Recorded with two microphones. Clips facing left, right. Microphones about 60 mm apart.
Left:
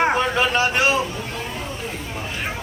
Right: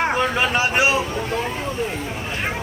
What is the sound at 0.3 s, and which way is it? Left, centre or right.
Speech, centre.